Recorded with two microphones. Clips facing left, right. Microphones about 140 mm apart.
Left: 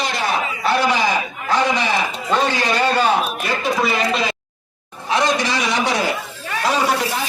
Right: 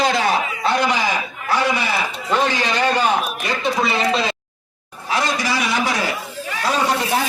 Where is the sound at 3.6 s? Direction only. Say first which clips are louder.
Even; 25° right (ahead or behind).